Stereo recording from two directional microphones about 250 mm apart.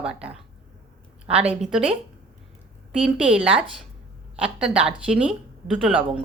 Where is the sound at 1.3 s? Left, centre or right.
Right.